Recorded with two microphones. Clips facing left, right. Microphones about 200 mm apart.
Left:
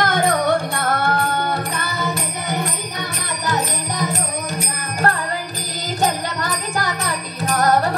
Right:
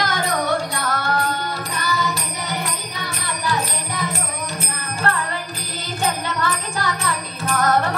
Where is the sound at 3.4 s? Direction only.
40° left (ahead or behind).